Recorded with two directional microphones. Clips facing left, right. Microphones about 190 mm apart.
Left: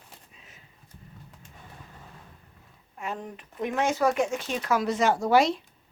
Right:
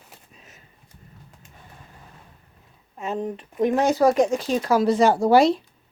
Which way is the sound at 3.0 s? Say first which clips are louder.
Right 8 dB; 25° right (ahead or behind).